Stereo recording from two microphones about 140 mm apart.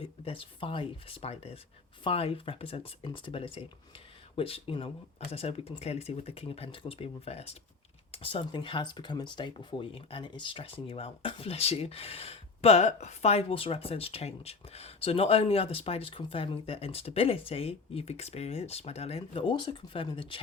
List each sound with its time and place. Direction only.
0.0 s speech: 40° left (ahead or behind)